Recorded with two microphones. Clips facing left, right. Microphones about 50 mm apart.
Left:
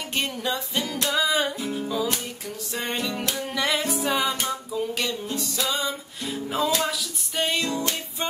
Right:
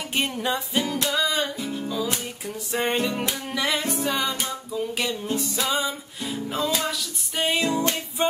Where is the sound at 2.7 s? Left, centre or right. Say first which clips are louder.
Right 5 dB; right.